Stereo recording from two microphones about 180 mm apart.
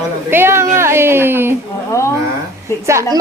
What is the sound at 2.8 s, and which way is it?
Speech, 15° right (ahead or behind).